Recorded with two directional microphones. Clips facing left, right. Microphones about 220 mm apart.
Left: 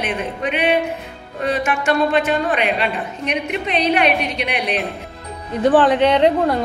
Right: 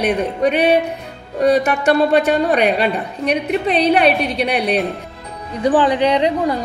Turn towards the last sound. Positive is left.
turn(degrees=0)  # may be behind; listen again after turning